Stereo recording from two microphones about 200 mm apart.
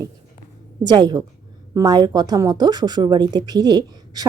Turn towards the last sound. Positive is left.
turn(degrees=-20)  # may be behind; listen again after turning